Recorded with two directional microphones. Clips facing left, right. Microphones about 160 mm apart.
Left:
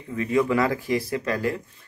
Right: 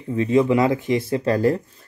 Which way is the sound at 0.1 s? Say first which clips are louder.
Right 5 dB; 25° right (ahead or behind).